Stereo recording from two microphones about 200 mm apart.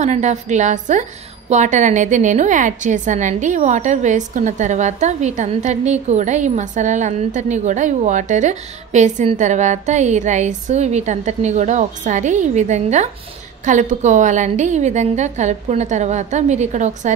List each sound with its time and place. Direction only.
0.0 s a woman's voice: 35° right (ahead or behind)